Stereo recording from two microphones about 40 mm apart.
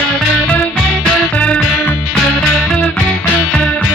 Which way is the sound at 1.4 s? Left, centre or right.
Left.